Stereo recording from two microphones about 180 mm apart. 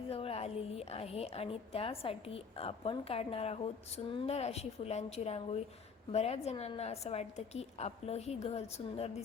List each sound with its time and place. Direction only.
0.1 s a woman's voice: 35° left (ahead or behind)